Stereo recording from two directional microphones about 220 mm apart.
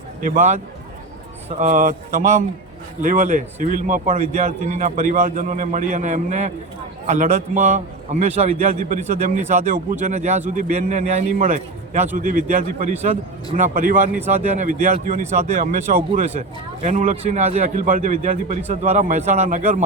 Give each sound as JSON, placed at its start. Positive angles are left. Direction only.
{"t": 0.2, "sound": "a man's voice", "side_deg": -35}